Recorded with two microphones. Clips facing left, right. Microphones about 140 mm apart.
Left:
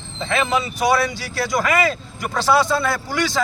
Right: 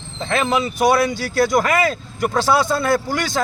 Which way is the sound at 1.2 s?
50° right (ahead or behind).